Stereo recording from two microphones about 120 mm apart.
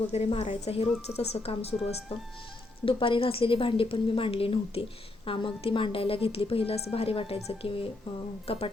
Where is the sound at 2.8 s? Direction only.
45° left (ahead or behind).